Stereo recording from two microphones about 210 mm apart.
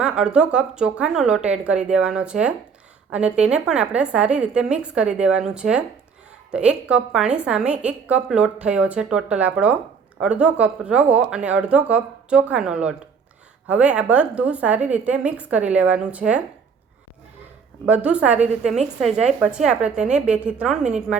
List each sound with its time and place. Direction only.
0.0 s a woman's voice: 5° right (ahead or behind)
17.8 s a woman's voice: 5° right (ahead or behind)